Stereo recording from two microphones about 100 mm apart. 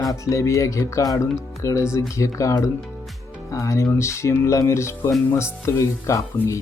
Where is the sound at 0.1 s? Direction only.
30° left (ahead or behind).